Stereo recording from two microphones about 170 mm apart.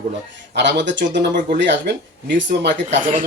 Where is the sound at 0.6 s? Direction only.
90° right.